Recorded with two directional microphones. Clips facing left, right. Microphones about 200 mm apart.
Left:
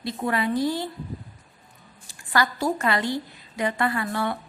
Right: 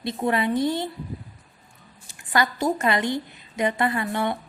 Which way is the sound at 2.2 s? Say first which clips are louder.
Right 1 dB; 20° right (ahead or behind).